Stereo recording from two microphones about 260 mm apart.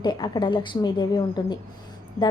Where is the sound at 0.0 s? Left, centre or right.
Centre.